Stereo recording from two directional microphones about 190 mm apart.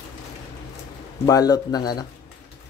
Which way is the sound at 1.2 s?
20° left (ahead or behind).